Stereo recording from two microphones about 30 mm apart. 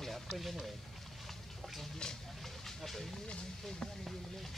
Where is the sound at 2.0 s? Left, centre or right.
Left.